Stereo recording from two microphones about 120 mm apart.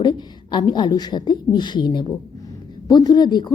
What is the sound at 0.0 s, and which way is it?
Speech, 40° left (ahead or behind).